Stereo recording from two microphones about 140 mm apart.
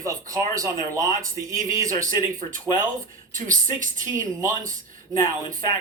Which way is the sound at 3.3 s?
65° right (ahead or behind).